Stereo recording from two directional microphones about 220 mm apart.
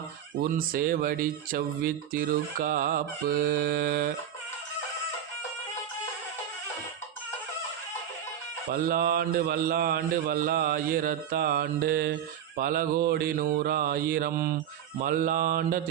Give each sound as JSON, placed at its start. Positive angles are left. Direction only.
{"t": 0.5, "sound": "speech", "side_deg": -40}
{"t": 8.7, "sound": "a man's voice", "side_deg": -45}